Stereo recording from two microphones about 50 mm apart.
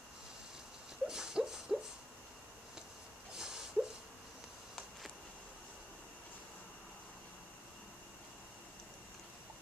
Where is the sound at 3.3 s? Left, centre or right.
Centre.